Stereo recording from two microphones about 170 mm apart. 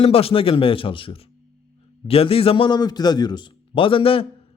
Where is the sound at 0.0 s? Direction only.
35° left (ahead or behind).